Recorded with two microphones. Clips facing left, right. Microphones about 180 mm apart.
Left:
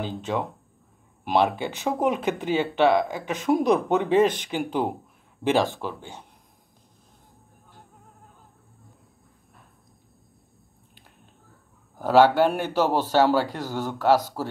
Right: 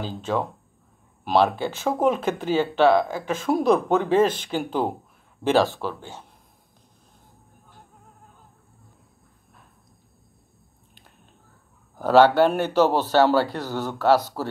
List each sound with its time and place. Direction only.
0.0 s speech: 20° left (ahead or behind)
12.0 s speech: 10° left (ahead or behind)